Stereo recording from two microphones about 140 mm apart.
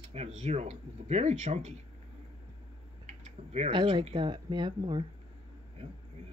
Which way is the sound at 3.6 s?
35° right (ahead or behind).